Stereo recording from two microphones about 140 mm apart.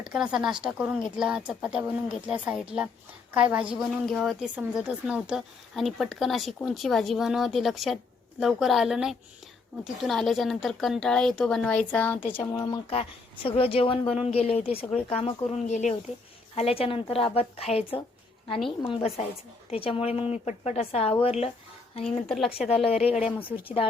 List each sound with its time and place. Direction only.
0.0 s a woman's voice: 5° right (ahead or behind); by 12.8 s 25° left (ahead or behind)
12.9 s a woman's voice: 45° left (ahead or behind)
16.6 s a woman's voice: 45° left (ahead or behind)
22.6 s speech: centre (ahead or behind)
23.0 s a woman's voice: 55° left (ahead or behind)